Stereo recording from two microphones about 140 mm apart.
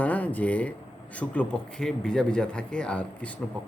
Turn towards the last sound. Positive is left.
turn(degrees=10)  # may be behind; listen again after turning